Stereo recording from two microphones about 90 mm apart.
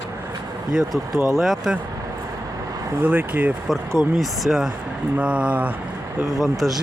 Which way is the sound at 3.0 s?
20° right (ahead or behind).